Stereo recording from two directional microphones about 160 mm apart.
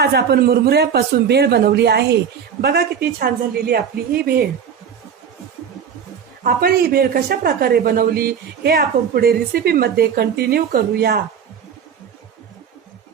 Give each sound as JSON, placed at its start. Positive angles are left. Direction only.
{"t": 0.0, "sound": "a man's voice", "side_deg": -90}
{"t": 2.6, "sound": "a man's voice", "side_deg": -80}
{"t": 6.4, "sound": "a man's voice", "side_deg": -65}